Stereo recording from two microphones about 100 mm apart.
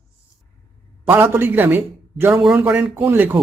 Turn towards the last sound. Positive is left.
turn(degrees=-20)  # may be behind; listen again after turning